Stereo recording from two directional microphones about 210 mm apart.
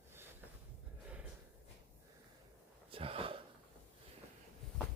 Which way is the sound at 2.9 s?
25° right (ahead or behind).